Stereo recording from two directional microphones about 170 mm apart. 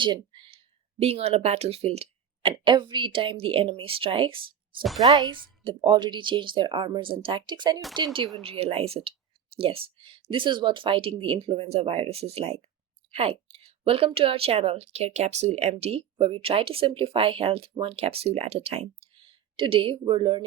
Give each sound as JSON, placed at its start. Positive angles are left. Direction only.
{"t": 0.0, "sound": "a woman's voice", "side_deg": -30}